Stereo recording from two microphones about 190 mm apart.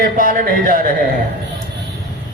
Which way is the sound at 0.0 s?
45° right (ahead or behind).